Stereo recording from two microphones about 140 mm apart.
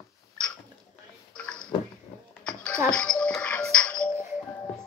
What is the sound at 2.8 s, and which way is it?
Music, 5° left (ahead or behind).